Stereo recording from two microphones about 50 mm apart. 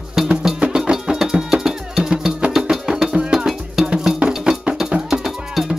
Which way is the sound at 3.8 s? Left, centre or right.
Centre.